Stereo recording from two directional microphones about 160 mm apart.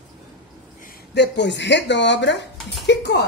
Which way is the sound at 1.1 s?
90° left.